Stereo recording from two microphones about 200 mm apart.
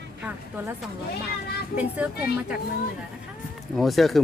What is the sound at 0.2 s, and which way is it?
A woman's voice, 5° right (ahead or behind).